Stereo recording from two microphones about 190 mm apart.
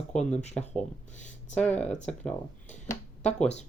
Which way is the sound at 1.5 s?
5° left (ahead or behind).